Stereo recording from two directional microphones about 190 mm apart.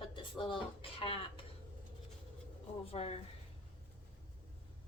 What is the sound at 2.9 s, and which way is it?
Speech, 30° left (ahead or behind).